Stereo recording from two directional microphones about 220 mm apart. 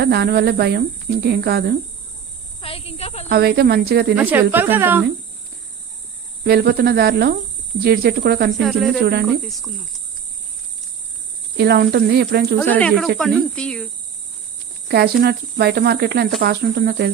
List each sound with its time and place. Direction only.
0.0 s speech: 45° right (ahead or behind)
2.6 s a sound: 25° left (ahead or behind)
3.2 s speech: 45° right (ahead or behind)
4.1 s speech: 10° right (ahead or behind)
6.4 s speech: 45° right (ahead or behind)
8.6 s cricket: centre (ahead or behind)
9.0 s speech: 45° right (ahead or behind)
9.4 s cricket: centre (ahead or behind)
11.5 s speech: 45° right (ahead or behind)
12.5 s cricket: 5° left (ahead or behind)
14.8 s speech: 45° right (ahead or behind)